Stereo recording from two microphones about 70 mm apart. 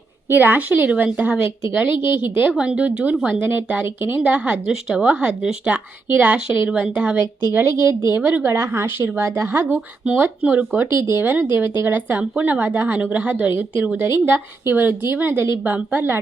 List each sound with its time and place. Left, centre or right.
0.3 s a woman's voice: right
2.5 s a woman's voice: centre; by 4.2 s right
4.2 s a woman's voice: right
4.6 s speech: centre
5.7 s a woman's voice: right
7.5 s a woman's voice: right
8.1 s a woman's voice: right
8.5 s a woman's voice: right
10.4 s a woman's voice: centre
11.1 s a woman's voice: right
14.0 s a woman's voice: right